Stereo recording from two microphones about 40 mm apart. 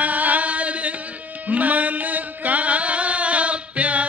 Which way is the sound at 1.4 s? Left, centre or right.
Right.